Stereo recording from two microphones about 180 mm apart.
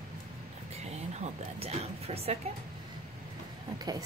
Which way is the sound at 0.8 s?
35° right (ahead or behind).